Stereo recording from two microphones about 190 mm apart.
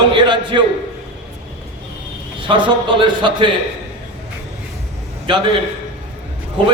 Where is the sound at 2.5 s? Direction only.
25° right (ahead or behind).